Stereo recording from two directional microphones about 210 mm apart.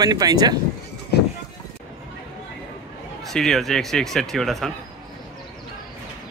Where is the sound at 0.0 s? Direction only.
20° right (ahead or behind).